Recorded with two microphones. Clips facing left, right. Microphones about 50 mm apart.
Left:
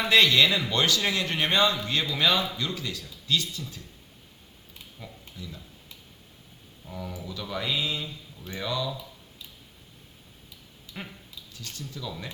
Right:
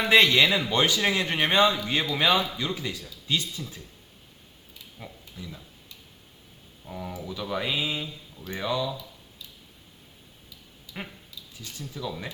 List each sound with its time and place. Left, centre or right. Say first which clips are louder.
0.0 s speech: right 1 dB; centre
4.9 s a sound: right 1 dB; centre
6.8 s speech: right 2 dB; centre
11.0 s speech: right 2 dB; centre